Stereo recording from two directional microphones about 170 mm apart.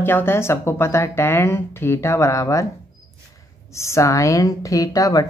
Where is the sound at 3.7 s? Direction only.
15° left (ahead or behind).